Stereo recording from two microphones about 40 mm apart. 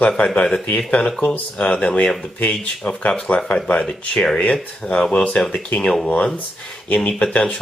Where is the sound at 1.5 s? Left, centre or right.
Left.